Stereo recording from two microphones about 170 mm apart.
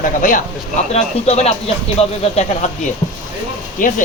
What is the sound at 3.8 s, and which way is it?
Speech, 50° left (ahead or behind).